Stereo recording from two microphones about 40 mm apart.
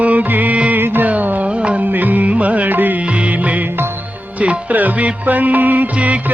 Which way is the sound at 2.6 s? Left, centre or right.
Right.